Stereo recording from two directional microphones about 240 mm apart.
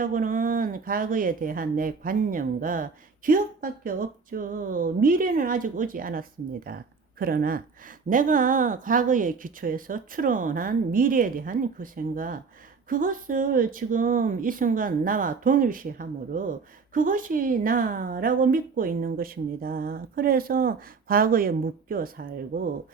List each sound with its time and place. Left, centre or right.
0.0 s speech: right